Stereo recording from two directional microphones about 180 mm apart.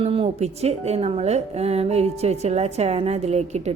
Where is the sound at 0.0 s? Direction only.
30° right (ahead or behind).